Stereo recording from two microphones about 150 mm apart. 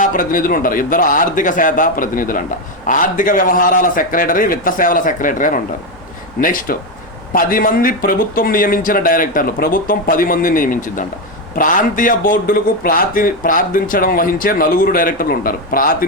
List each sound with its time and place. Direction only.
0.0 s a man's voice: 65° left (ahead or behind)